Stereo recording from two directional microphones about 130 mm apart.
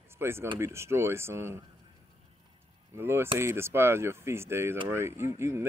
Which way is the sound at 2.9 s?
20° right (ahead or behind).